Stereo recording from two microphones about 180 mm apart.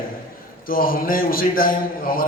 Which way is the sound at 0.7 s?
55° left (ahead or behind).